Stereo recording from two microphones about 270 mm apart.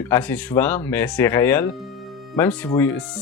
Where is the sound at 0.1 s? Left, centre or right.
Centre.